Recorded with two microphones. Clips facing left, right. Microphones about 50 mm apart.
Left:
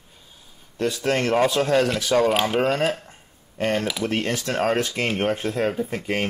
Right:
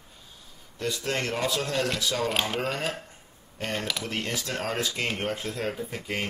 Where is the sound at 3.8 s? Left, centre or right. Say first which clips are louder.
Left 6 dB; centre.